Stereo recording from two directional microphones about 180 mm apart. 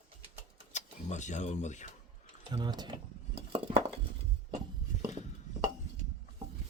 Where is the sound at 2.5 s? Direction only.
25° right (ahead or behind).